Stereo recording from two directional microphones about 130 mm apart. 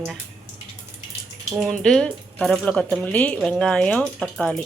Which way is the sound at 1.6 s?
5° left (ahead or behind).